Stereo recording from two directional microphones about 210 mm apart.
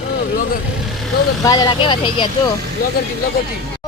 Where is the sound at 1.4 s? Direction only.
15° left (ahead or behind).